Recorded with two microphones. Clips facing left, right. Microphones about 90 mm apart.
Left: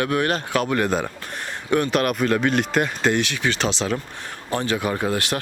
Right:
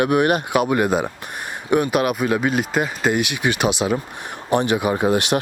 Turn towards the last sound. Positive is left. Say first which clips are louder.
# right 5 dB
turn(degrees=-20)  # may be behind; listen again after turning